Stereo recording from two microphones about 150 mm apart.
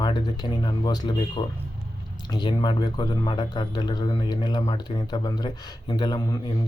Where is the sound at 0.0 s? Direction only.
30° left (ahead or behind).